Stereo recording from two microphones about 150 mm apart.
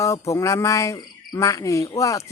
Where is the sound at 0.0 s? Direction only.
20° left (ahead or behind).